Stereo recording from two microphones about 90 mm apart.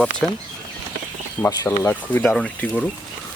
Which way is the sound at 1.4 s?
15° left (ahead or behind).